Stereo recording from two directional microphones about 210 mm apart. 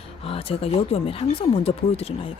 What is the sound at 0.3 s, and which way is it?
Speech, 25° left (ahead or behind).